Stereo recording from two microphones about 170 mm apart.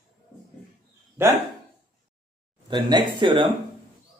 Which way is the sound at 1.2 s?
15° right (ahead or behind).